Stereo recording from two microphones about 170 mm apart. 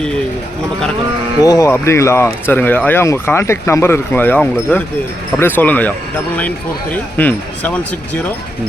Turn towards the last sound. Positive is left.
turn(degrees=10)  # may be behind; listen again after turning